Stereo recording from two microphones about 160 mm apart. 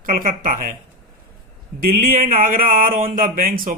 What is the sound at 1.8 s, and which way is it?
Speech, 65° right (ahead or behind).